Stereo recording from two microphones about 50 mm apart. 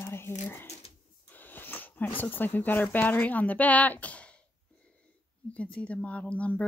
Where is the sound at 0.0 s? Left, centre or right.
Left.